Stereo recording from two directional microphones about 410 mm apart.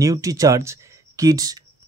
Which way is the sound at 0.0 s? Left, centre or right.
Centre.